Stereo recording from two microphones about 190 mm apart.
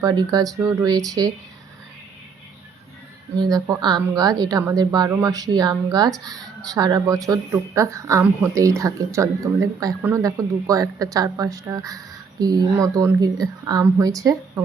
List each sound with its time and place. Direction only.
0.0 s a woman's voice: 20° right (ahead or behind)
3.3 s a woman's voice: 20° right (ahead or behind)